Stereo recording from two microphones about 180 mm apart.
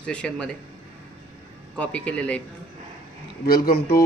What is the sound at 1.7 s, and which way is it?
Speech, 5° left (ahead or behind).